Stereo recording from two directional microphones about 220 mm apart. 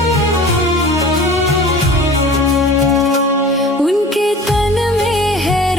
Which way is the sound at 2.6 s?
Centre (ahead or behind).